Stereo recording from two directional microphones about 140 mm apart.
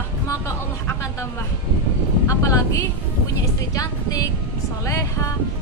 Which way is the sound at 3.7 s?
25° left (ahead or behind).